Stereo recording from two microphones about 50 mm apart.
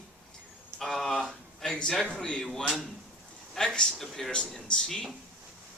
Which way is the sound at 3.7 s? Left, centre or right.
Centre.